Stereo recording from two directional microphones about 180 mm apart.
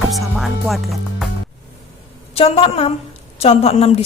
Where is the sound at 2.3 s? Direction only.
35° left (ahead or behind).